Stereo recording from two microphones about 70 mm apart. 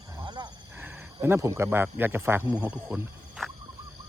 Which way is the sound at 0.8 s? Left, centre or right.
Right.